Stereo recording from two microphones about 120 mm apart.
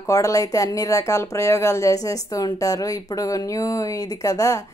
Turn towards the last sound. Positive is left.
turn(degrees=30)  # may be behind; listen again after turning